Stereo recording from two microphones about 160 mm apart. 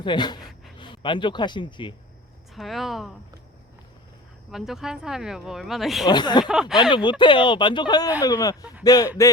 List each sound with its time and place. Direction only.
0.0 s speech: 30° left (ahead or behind)
2.6 s speech: centre (ahead or behind)
4.5 s speech: centre (ahead or behind)
6.1 s speech: 25° left (ahead or behind)
6.4 s speech: 5° right (ahead or behind)
6.9 s speech: 30° left (ahead or behind)